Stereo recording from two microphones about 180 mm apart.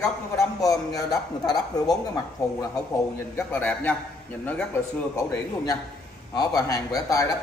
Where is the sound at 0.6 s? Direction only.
20° left (ahead or behind).